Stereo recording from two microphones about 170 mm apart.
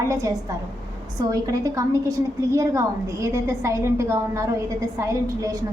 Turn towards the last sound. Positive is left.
turn(degrees=-20)  # may be behind; listen again after turning